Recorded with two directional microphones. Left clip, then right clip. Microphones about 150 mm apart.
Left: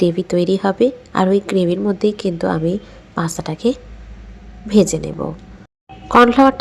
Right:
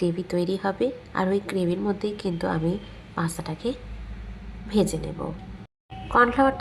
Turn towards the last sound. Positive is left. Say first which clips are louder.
# left 9 dB
turn(degrees=25)  # may be behind; listen again after turning